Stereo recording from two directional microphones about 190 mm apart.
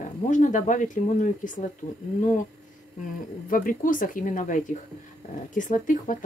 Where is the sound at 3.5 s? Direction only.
45° left (ahead or behind).